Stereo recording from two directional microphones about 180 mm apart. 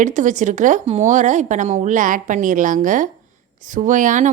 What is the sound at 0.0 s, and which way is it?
A woman's voice, 45° right (ahead or behind).